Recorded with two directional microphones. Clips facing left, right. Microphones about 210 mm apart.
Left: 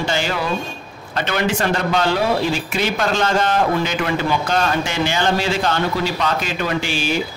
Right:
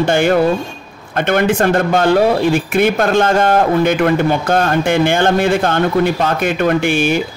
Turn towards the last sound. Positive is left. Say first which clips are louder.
# right 7 dB
turn(degrees=-55)  # may be behind; listen again after turning